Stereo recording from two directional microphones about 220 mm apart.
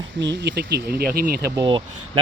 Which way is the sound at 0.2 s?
50° right (ahead or behind).